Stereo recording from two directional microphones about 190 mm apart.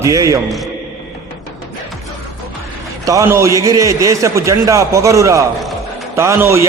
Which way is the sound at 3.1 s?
15° right (ahead or behind).